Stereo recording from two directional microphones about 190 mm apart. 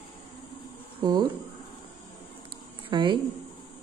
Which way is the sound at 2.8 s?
25° right (ahead or behind).